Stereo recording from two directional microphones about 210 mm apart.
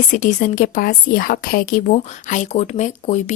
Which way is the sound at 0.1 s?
35° left (ahead or behind).